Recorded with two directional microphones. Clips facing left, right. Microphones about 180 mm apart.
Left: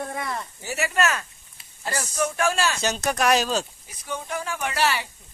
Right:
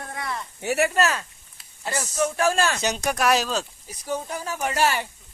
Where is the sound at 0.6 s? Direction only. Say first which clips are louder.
Right 8 dB; 65° right (ahead or behind).